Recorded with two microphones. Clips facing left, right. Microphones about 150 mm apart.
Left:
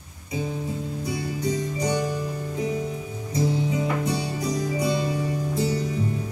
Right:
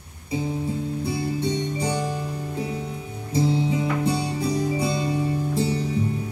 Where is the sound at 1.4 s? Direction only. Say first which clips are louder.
Right 1 dB; 30° right (ahead or behind).